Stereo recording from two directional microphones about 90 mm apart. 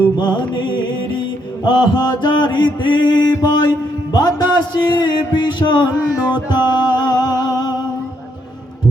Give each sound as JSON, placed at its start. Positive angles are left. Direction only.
{"t": 0.2, "sound": "music", "side_deg": 60}